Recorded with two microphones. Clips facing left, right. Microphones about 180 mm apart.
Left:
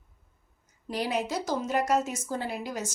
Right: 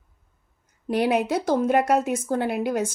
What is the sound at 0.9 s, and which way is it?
A woman's voice, 60° right (ahead or behind).